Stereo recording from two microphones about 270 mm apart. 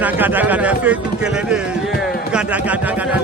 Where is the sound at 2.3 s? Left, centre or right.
Centre.